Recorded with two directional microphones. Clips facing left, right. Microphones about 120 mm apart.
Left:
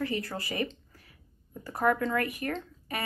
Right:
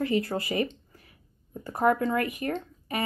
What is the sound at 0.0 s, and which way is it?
Speech, 25° right (ahead or behind).